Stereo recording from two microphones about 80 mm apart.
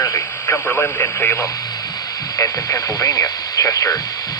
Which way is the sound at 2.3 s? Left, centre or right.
Left.